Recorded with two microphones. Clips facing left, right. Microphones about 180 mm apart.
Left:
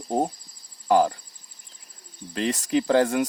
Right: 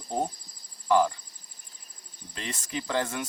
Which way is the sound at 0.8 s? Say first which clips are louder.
Left 3 dB; 45° left (ahead or behind).